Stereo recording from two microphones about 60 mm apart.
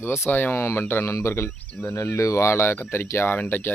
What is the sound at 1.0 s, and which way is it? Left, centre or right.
Speech, left.